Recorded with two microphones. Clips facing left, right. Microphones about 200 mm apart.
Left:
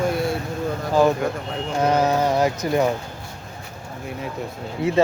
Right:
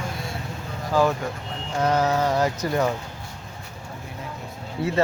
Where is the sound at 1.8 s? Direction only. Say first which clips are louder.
Left 2 dB; 15° left (ahead or behind).